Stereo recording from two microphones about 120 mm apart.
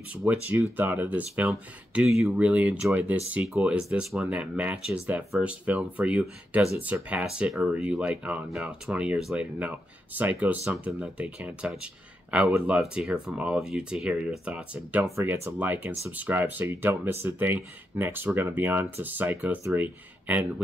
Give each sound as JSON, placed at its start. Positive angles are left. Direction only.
{"t": 0.1, "sound": "speech", "side_deg": -10}
{"t": 15.1, "sound": "speech", "side_deg": -20}